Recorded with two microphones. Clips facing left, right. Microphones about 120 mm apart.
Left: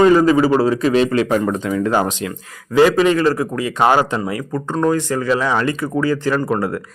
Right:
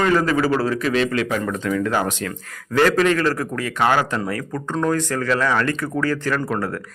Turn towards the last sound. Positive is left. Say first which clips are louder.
# left 4 dB
turn(degrees=15)  # may be behind; listen again after turning